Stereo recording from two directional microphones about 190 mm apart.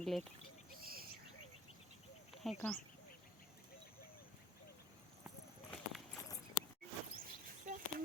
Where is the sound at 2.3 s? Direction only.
Centre (ahead or behind).